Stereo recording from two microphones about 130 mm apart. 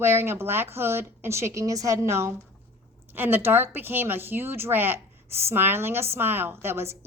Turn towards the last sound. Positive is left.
turn(degrees=-20)  # may be behind; listen again after turning